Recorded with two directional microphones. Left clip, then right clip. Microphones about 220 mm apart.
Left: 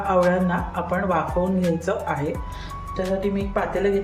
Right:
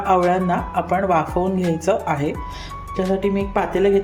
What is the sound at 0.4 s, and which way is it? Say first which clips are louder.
Speech: right 5 dB; 35° right (ahead or behind).